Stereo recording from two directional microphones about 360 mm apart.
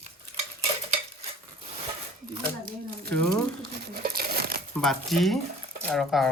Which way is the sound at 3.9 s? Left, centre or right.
Right.